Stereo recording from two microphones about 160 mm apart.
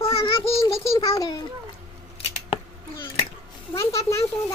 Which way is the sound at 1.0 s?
20° left (ahead or behind).